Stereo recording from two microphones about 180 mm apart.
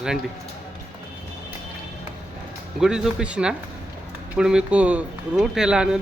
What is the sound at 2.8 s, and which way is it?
Speech, 5° right (ahead or behind).